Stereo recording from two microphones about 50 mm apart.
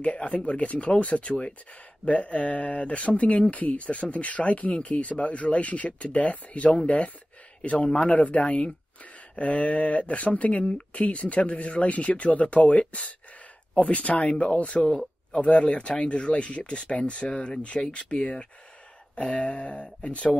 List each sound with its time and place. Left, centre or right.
0.0 s speech: left